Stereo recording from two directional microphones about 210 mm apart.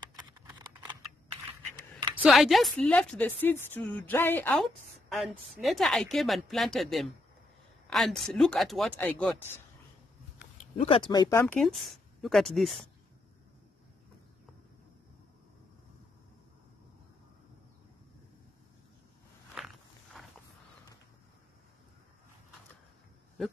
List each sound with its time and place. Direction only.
0.0 s a sound: 20° right (ahead or behind)
0.5 s typing: 15° right (ahead or behind)
1.3 s a sound: 25° right (ahead or behind)
2.2 s a woman's voice: centre (ahead or behind)
10.8 s speech: 25° left (ahead or behind)
11.4 s a woman's voice: centre (ahead or behind)
19.6 s walk: centre (ahead or behind)
20.2 s wild animals: centre (ahead or behind)